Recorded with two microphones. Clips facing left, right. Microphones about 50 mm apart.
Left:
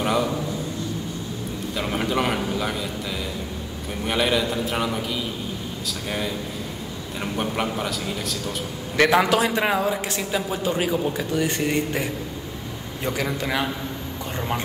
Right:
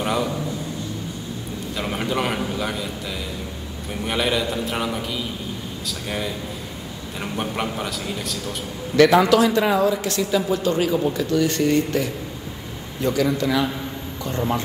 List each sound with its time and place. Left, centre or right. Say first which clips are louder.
0.0 s a man's voice: left 1 dB; centre
1.8 s a man's voice: even; centre
4.0 s a man's voice: even; centre
8.9 s speech: right 4 dB; left